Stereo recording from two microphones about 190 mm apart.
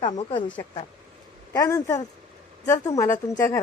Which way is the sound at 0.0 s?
25° left (ahead or behind).